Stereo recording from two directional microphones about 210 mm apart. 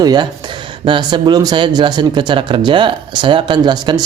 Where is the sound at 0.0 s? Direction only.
20° right (ahead or behind).